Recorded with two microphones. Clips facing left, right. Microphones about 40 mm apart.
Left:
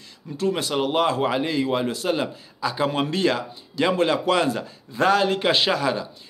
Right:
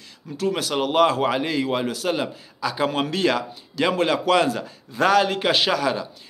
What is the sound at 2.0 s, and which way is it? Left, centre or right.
Speech, centre.